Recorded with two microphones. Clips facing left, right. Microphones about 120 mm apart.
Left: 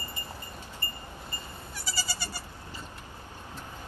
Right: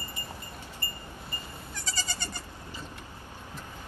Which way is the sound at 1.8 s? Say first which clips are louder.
Left 1 dB; 10° left (ahead or behind).